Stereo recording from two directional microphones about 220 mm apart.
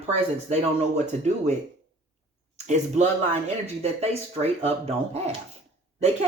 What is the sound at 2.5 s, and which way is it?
Speech, 30° right (ahead or behind).